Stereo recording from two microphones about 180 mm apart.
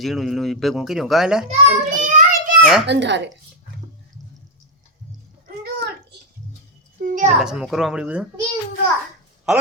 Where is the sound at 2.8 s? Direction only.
75° right (ahead or behind).